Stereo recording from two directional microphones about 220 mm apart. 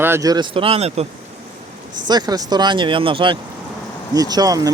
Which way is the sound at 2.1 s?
20° right (ahead or behind).